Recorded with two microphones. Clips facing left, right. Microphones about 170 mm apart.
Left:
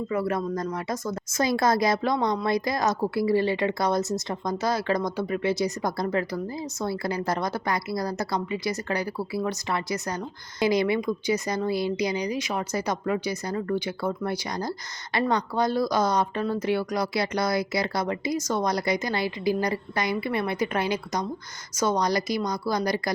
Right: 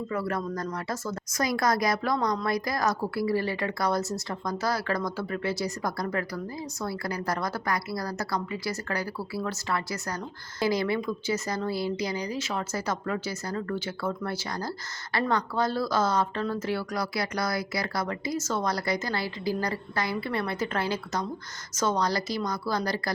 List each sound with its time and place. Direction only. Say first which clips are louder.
0.1 s a woman's voice: left 4 dB; 20° left (ahead or behind)